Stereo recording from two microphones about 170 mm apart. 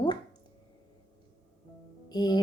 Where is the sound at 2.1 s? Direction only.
25° left (ahead or behind).